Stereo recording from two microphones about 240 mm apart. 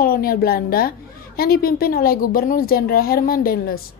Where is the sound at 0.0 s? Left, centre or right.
Left.